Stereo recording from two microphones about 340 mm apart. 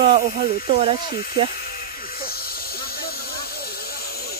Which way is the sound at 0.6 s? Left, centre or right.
Centre.